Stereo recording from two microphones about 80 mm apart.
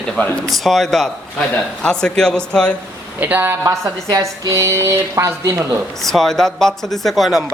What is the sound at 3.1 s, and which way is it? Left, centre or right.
Speech, right.